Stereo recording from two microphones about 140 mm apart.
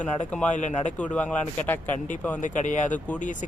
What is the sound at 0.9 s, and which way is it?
Speech, 10° left (ahead or behind).